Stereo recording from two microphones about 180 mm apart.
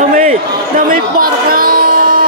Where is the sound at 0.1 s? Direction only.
45° right (ahead or behind).